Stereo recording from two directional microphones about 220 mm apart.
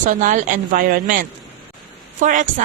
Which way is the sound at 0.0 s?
35° right (ahead or behind).